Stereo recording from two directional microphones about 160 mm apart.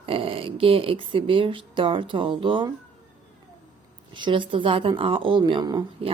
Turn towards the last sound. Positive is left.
turn(degrees=-25)  # may be behind; listen again after turning